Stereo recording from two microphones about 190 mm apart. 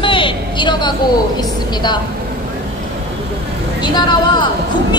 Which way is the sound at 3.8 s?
25° left (ahead or behind).